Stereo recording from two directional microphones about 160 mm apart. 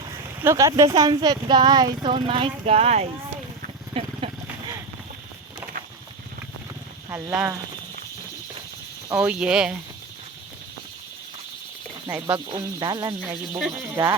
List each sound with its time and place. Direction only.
0.0 s a sound: 20° right (ahead or behind)
0.9 s speech: 25° right (ahead or behind); by 3.1 s 45° right (ahead or behind)
3.9 s vehicle: 35° right (ahead or behind)
7.1 s speech: 10° right (ahead or behind)
9.1 s speech: 5° right (ahead or behind)
12.1 s speech: 25° right (ahead or behind)
13.2 s speech: 10° right (ahead or behind)
13.7 s speech: 25° right (ahead or behind)